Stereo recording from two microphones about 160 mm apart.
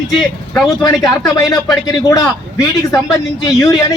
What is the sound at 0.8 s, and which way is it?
A man's voice, 20° left (ahead or behind).